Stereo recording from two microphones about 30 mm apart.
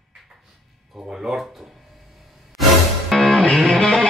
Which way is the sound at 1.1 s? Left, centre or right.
Right.